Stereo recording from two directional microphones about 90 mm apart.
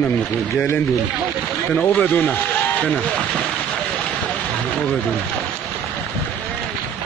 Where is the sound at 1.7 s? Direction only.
15° left (ahead or behind).